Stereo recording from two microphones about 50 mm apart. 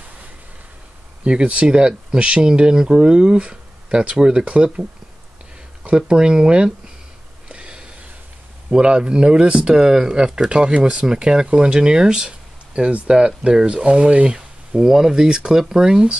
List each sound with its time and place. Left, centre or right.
1.2 s speech: right
5.9 s speech: centre
7.4 s a sound: right
8.6 s speech: centre